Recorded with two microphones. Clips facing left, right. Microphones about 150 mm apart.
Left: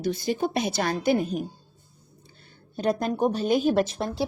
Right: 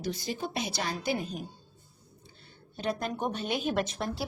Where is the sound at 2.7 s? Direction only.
40° left (ahead or behind).